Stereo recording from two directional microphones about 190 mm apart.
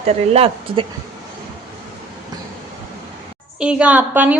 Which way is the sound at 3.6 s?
5° right (ahead or behind).